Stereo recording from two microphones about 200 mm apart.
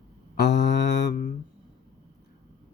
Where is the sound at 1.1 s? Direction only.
40° left (ahead or behind).